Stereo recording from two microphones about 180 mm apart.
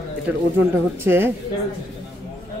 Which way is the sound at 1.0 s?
10° right (ahead or behind).